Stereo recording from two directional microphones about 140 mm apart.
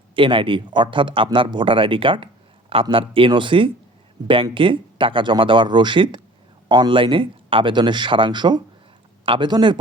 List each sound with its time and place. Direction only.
0.2 s speech: 35° right (ahead or behind)